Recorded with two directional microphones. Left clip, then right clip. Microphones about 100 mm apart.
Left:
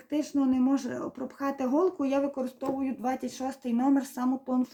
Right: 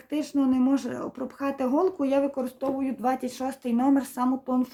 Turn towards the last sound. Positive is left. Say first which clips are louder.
# right 3 dB
turn(degrees=-30)  # may be behind; listen again after turning